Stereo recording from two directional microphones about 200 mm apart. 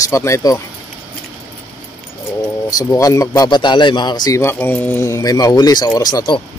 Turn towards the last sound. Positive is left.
turn(degrees=20)  # may be behind; listen again after turning